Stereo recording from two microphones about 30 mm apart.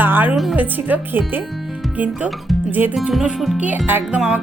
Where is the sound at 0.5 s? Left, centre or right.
Right.